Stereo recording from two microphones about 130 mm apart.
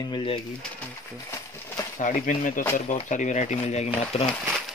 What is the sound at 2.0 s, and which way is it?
Speech, 80° left.